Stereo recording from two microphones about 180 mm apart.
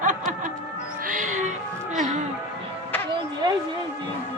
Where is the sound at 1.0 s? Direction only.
45° right (ahead or behind).